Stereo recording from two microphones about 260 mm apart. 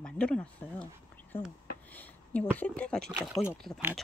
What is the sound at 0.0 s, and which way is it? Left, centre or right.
Speech, centre.